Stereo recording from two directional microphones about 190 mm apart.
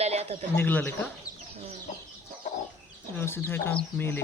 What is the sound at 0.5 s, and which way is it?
Speech, 10° left (ahead or behind).